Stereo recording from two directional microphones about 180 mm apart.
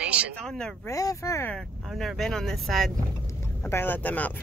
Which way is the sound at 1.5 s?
Centre (ahead or behind).